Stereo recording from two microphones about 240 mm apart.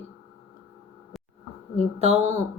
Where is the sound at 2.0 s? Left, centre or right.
Right.